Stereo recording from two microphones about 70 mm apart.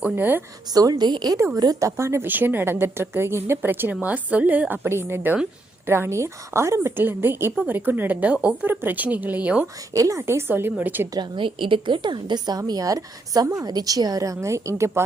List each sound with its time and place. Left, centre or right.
0.0 s a woman's voice: right
0.7 s a woman's voice: right
1.8 s a woman's voice: right
2.2 s a woman's voice: right
9.9 s a woman's voice: right
10.2 s a woman's voice: right
12.0 s a woman's voice: right